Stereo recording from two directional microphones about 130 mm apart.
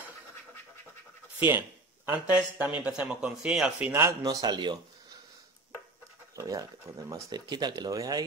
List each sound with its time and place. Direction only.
2.0 s speech: 10° right (ahead or behind)
3.9 s speech: 25° right (ahead or behind)
6.3 s speech: 25° right (ahead or behind)